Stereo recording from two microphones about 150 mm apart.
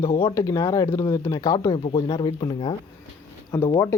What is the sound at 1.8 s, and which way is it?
Speech, 35° left (ahead or behind).